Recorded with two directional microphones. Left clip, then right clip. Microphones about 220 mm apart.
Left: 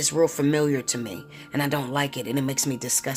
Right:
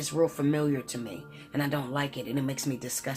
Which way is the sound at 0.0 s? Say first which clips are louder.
Left 5 dB; 45° left (ahead or behind).